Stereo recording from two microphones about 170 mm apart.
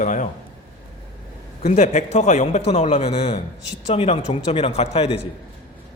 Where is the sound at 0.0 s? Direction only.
45° left (ahead or behind).